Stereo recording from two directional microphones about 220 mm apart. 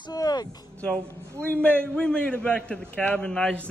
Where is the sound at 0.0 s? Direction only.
20° left (ahead or behind).